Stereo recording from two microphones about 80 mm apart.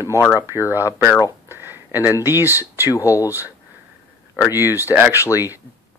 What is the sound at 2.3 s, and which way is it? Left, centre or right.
Speech, right.